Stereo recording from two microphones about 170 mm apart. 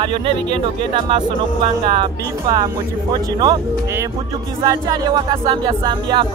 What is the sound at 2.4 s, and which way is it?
Speech, 25° right (ahead or behind).